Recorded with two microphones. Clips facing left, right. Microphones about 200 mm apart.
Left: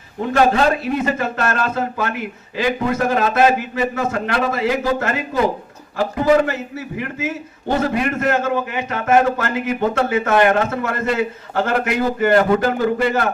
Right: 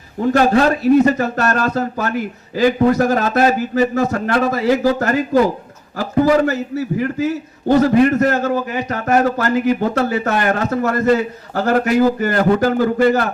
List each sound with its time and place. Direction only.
0.5 s a man's voice: 40° right (ahead or behind)